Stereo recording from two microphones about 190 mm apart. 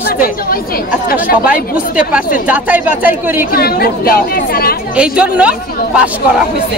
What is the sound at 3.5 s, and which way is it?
Speech, 55° left (ahead or behind).